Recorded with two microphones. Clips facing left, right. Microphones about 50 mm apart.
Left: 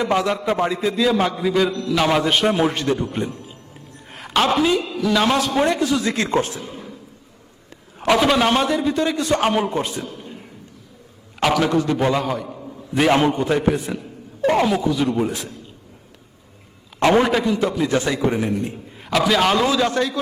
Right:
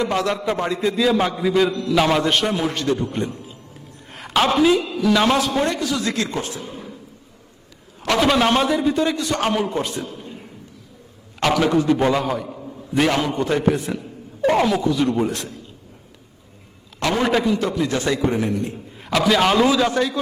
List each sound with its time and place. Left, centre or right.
0.0 s a man's voice: centre
2.5 s a man's voice: centre
4.1 s a woman's voice: centre
5.5 s a man's voice: centre
6.1 s a man's voice: left
8.0 s a man's voice: centre
9.4 s a man's voice: centre
11.3 s a man's voice: centre
13.1 s a man's voice: left
13.3 s a man's voice: centre
17.0 s a man's voice: left
17.2 s a man's voice: centre